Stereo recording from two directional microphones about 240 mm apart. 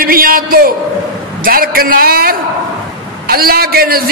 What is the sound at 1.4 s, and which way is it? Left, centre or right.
A man's voice, right.